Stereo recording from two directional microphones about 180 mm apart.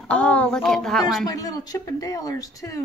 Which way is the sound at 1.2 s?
20° left (ahead or behind).